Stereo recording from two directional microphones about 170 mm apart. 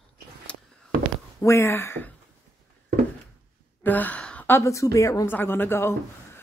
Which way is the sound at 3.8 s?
10° left (ahead or behind).